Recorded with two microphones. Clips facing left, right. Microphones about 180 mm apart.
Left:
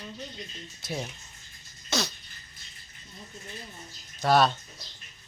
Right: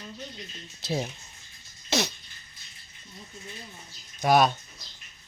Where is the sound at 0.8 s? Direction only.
30° right (ahead or behind).